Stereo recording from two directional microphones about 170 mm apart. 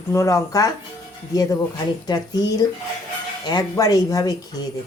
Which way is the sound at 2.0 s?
25° left (ahead or behind).